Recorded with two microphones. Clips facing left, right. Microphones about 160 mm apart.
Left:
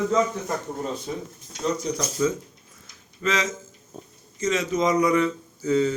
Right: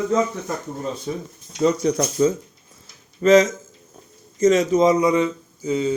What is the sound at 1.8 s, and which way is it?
Speech, 65° right (ahead or behind).